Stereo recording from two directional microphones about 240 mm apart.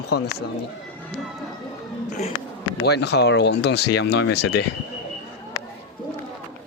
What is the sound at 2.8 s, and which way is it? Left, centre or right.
Speech, left.